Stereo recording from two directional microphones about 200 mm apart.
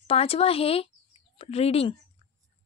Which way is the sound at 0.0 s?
30° left (ahead or behind).